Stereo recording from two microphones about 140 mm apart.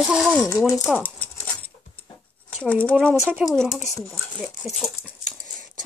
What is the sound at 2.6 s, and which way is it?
Speech, 10° left (ahead or behind).